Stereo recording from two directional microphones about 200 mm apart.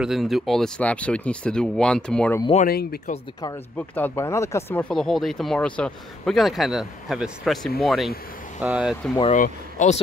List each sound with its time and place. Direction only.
0.0 s speech: centre (ahead or behind)
2.6 s speech: 50° left (ahead or behind)
3.7 s speech: 10° left (ahead or behind)
4.7 s speech: 5° left (ahead or behind)
9.2 s speech: 40° left (ahead or behind)